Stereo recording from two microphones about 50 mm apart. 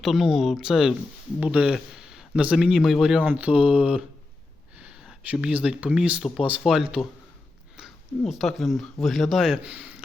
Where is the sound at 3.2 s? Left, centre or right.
Right.